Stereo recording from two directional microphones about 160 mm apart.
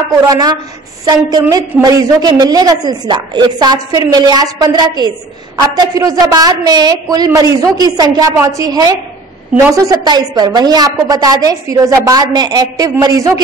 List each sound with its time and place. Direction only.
0.3 s a woman's voice: 25° right (ahead or behind)